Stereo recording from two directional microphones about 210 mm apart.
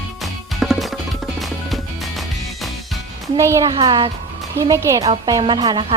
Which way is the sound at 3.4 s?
15° right (ahead or behind).